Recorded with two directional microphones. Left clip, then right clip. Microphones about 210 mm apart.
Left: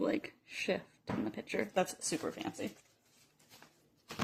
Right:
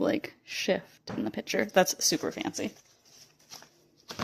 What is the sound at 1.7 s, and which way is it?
Speech, 50° right (ahead or behind).